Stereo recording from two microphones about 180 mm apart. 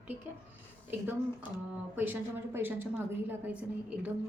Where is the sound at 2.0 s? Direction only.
10° right (ahead or behind).